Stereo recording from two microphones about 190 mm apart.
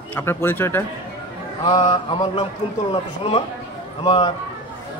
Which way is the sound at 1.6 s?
25° left (ahead or behind).